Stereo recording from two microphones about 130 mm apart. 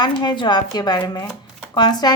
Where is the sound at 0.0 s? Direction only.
35° left (ahead or behind).